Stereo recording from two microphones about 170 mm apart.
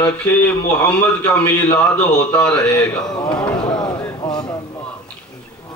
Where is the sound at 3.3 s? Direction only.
5° left (ahead or behind).